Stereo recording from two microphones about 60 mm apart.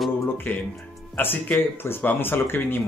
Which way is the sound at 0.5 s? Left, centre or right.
Left.